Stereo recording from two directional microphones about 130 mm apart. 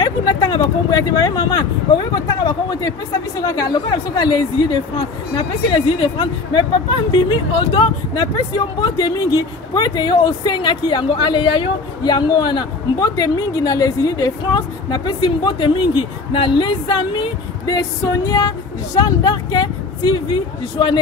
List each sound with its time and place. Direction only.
0.0 s speech: 35° left (ahead or behind)
17.6 s music: 30° left (ahead or behind)
18.9 s speech: 30° left (ahead or behind)